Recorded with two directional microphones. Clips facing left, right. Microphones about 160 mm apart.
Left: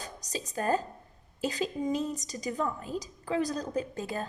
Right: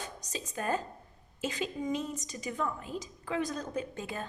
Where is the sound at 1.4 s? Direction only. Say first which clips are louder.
Left 3 dB; 35° left (ahead or behind).